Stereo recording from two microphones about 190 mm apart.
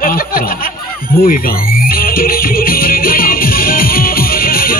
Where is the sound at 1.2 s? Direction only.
50° left (ahead or behind).